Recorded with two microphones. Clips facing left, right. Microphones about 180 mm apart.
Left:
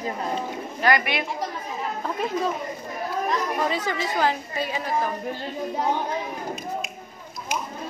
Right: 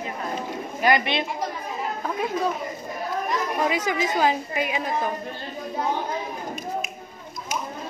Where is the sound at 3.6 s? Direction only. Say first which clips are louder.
Right 2 dB; 10° right (ahead or behind).